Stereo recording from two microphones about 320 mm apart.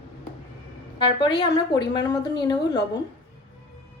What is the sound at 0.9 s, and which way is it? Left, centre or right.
A woman's voice, centre.